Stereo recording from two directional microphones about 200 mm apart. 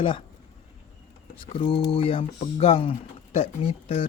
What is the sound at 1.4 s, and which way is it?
Speech, 25° left (ahead or behind).